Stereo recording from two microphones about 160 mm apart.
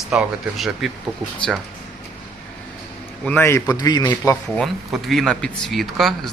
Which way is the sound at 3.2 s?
10° left (ahead or behind).